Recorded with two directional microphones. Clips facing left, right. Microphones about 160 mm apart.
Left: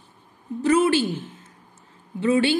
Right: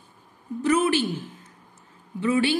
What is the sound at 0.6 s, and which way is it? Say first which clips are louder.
A woman's voice: left 3 dB; 30° left (ahead or behind).